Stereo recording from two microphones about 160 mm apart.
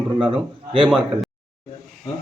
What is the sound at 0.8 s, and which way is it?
Speech, 5° right (ahead or behind).